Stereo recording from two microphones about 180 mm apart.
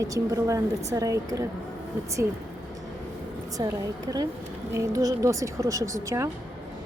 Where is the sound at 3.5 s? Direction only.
15° right (ahead or behind).